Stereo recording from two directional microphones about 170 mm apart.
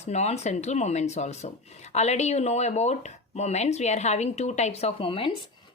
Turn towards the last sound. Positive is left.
turn(degrees=30)  # may be behind; listen again after turning